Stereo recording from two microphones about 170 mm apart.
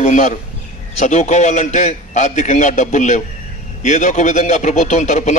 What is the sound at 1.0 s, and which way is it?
A man's voice, 40° left (ahead or behind).